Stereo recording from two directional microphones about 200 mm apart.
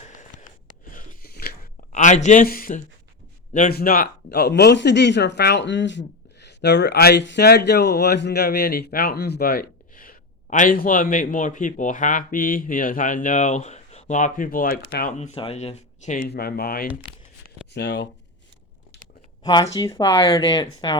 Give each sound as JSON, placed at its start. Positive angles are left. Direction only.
{"t": 0.9, "sound": "a sound", "side_deg": 45}
{"t": 3.5, "sound": "speech", "side_deg": 45}
{"t": 15.2, "sound": "speech", "side_deg": 30}
{"t": 16.3, "sound": "speech", "side_deg": 50}
{"t": 19.4, "sound": "speech", "side_deg": 20}